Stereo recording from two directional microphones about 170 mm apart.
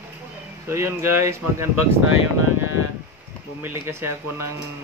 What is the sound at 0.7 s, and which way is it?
Speech, 15° right (ahead or behind).